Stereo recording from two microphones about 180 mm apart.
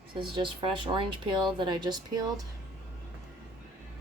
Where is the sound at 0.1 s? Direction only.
30° right (ahead or behind).